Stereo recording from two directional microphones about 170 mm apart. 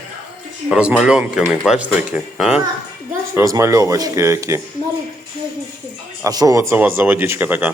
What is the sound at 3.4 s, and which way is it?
Speech, 20° right (ahead or behind).